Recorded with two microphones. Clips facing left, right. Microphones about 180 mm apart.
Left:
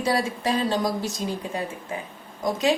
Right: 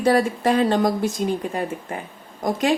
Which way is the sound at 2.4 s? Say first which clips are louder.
Right 1 dB; 55° right (ahead or behind).